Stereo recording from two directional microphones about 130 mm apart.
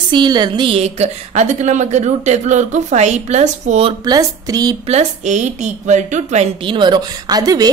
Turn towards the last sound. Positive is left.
turn(degrees=-30)  # may be behind; listen again after turning